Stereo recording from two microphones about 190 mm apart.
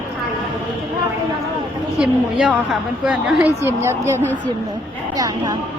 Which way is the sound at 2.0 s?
5° right (ahead or behind).